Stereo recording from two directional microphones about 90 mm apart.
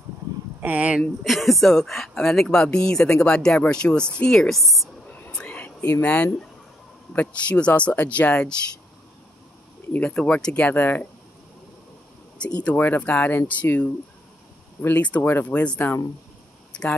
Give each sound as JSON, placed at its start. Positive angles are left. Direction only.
{"t": 0.6, "sound": "speech", "side_deg": -15}
{"t": 1.2, "sound": "a woman's voice", "side_deg": 0}
{"t": 5.3, "sound": "whispering", "side_deg": 15}
{"t": 7.1, "sound": "speech", "side_deg": 15}
{"t": 9.9, "sound": "speech", "side_deg": 15}
{"t": 12.6, "sound": "speech", "side_deg": 20}